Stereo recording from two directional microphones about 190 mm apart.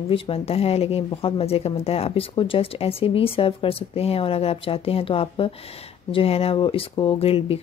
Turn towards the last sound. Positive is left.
turn(degrees=30)  # may be behind; listen again after turning